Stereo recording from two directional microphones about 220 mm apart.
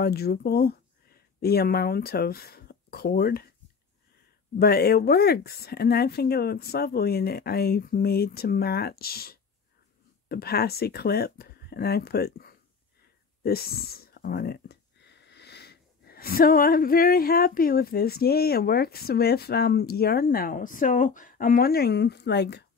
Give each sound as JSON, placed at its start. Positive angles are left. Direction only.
{"t": 0.0, "sound": "speech", "side_deg": 45}
{"t": 4.6, "sound": "speech", "side_deg": 45}